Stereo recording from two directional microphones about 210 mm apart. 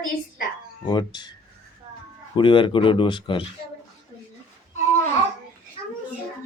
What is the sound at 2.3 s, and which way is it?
Speech, 25° left (ahead or behind).